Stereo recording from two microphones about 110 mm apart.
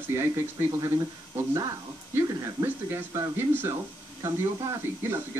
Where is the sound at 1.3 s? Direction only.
30° right (ahead or behind).